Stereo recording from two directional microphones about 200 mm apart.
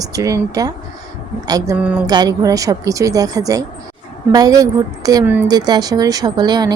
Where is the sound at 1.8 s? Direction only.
5° right (ahead or behind).